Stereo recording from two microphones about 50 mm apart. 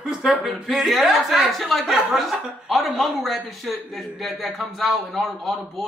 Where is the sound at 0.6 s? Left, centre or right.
Centre.